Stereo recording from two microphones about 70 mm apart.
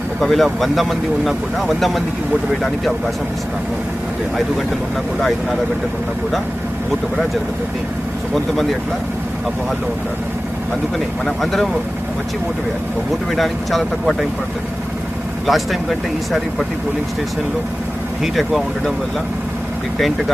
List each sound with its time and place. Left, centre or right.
0.2 s speech: centre
11.3 s speech: centre
13.3 s speech: centre
15.4 s speech: centre
18.2 s speech: centre
20.0 s speech: centre